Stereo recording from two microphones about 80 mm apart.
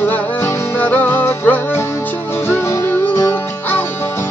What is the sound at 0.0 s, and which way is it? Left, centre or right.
Music, left.